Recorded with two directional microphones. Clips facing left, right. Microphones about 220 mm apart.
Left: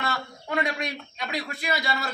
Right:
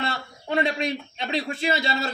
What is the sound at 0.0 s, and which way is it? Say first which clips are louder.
A man's voice: right 1 dB; 30° right (ahead or behind).